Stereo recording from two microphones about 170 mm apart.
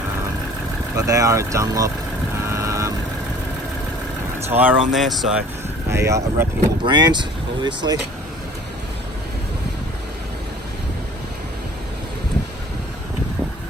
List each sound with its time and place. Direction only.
0.9 s speech: 20° right (ahead or behind)
2.4 s vehicle: 15° right (ahead or behind)
4.4 s speech: 10° right (ahead or behind)
5.9 s speech: 15° right (ahead or behind)